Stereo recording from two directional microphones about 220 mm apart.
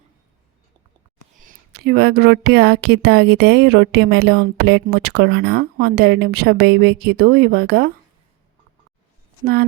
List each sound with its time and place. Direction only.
1.4 s speech: 40° right (ahead or behind)